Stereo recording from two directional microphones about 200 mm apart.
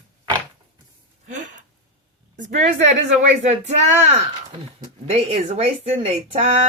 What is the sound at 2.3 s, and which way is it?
Speech, 40° right (ahead or behind).